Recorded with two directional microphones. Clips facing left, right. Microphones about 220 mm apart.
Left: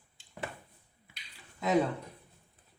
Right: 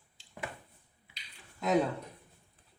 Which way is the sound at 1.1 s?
45° left (ahead or behind).